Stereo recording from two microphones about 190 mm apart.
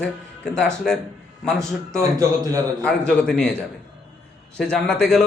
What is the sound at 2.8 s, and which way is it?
Speech, 5° left (ahead or behind).